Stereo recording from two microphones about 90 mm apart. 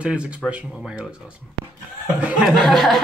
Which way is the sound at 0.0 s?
15° right (ahead or behind).